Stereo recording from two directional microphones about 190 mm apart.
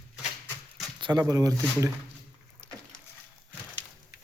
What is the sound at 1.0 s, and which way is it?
Speech, 25° right (ahead or behind).